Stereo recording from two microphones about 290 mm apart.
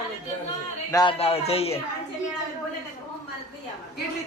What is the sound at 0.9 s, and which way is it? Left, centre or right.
Speech, centre.